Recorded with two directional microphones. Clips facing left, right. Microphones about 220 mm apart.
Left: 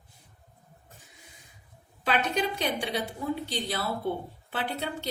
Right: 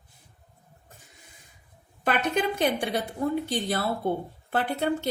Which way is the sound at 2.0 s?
55° right (ahead or behind).